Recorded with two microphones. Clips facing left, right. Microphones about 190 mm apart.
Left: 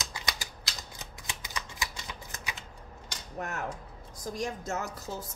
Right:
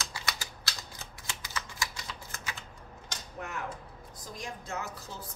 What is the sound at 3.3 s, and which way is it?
Speech, 45° left (ahead or behind).